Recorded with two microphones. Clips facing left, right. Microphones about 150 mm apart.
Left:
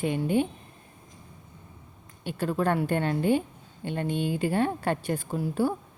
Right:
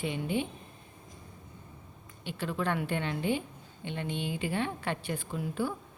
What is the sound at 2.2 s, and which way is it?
A woman's voice, 45° left (ahead or behind).